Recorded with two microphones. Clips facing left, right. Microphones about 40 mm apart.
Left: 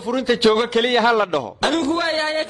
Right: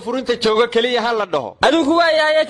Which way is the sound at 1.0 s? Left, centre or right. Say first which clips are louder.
Left 2 dB; centre.